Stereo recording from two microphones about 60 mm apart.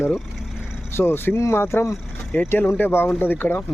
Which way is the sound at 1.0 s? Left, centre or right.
Left.